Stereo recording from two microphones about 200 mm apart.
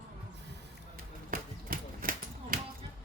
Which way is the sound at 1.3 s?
45° right (ahead or behind).